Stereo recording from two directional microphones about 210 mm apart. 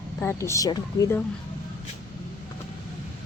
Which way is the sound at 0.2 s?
10° left (ahead or behind).